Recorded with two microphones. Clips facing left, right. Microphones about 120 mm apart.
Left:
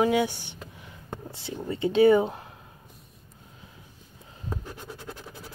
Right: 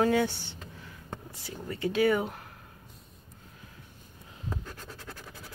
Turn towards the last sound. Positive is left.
turn(degrees=20)  # may be behind; listen again after turning